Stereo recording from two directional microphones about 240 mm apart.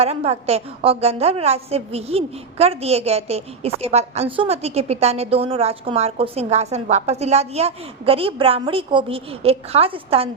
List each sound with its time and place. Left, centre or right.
0.0 s a woman's voice: right